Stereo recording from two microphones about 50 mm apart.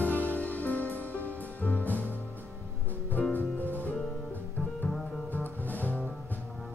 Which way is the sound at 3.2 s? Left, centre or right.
Left.